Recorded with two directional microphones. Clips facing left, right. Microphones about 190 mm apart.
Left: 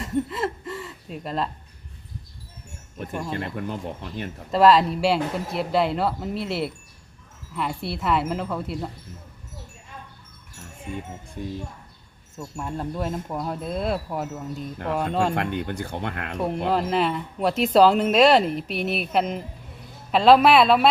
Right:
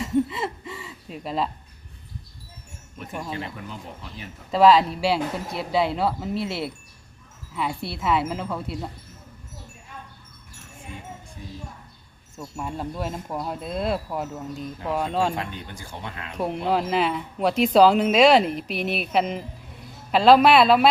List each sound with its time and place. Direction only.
0.0 s chuckle: centre (ahead or behind)
3.1 s speech: 5° right (ahead or behind)
3.3 s speech: 55° left (ahead or behind)
4.5 s speech: centre (ahead or behind)
12.4 s speech: 5° right (ahead or behind)
15.4 s speech: 60° left (ahead or behind)
16.6 s speech: centre (ahead or behind)